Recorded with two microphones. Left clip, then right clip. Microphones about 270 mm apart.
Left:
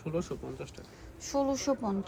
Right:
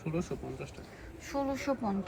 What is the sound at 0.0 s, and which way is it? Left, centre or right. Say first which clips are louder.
Speech: left 2 dB; centre.